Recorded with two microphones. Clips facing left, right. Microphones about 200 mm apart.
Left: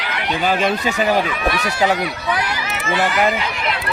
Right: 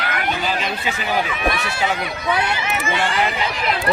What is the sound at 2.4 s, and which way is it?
Speech, 25° right (ahead or behind).